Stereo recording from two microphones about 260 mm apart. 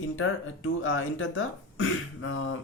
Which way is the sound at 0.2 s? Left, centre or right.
Left.